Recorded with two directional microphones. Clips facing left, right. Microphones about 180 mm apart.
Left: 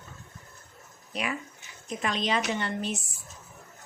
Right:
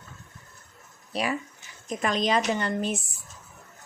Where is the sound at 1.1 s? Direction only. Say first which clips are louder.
Right 4 dB; 35° right (ahead or behind).